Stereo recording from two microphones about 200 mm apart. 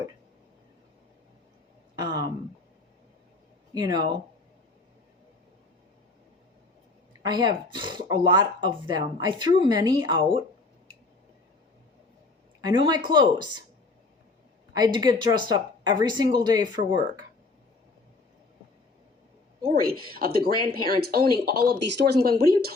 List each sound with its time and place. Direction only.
3.8 s speech: 20° right (ahead or behind)
7.3 s speech: 20° right (ahead or behind)
12.6 s speech: 20° right (ahead or behind)
14.7 s speech: 20° right (ahead or behind)
19.6 s speech: 50° right (ahead or behind)